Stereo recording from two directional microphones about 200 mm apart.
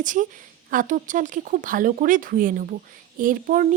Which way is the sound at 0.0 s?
40° right (ahead or behind).